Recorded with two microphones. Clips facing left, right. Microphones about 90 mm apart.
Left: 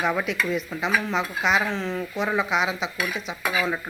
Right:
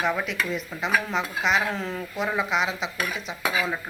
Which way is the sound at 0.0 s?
5° left (ahead or behind).